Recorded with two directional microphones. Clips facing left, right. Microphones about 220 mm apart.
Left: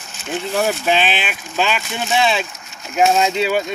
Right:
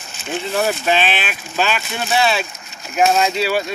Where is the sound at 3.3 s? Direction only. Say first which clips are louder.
Left 1 dB; 15° left (ahead or behind).